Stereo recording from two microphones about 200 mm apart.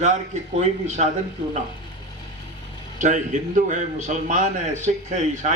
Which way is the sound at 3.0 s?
40° right (ahead or behind).